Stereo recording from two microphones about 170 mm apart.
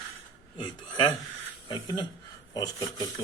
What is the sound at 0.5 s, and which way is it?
Speech, 25° left (ahead or behind).